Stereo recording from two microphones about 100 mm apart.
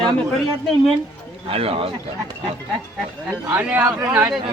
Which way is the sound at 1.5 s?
75° right (ahead or behind).